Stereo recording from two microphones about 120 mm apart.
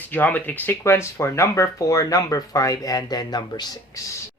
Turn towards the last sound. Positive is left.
turn(degrees=30)  # may be behind; listen again after turning